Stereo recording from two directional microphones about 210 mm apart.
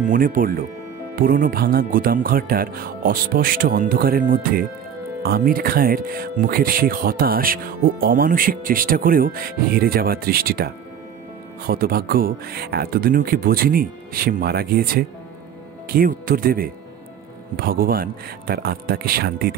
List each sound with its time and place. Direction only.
0.0 s speech: 40° right (ahead or behind)